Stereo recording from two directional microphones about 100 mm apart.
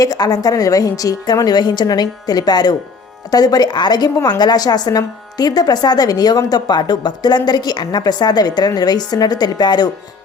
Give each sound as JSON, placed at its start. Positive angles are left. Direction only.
{"t": 0.0, "sound": "a woman's voice", "side_deg": 40}